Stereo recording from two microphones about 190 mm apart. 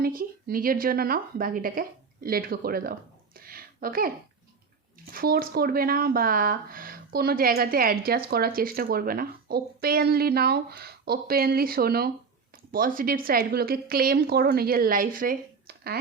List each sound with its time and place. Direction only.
0.0 s a woman's voice: 50° right (ahead or behind)
5.1 s speech: 50° right (ahead or behind)